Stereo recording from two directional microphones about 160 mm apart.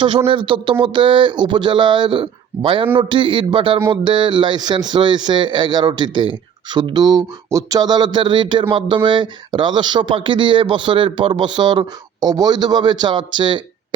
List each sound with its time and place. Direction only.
0.3 s speech: 35° right (ahead or behind)